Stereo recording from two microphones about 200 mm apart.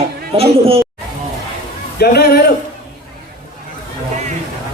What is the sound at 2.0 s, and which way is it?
Speech, 50° left (ahead or behind).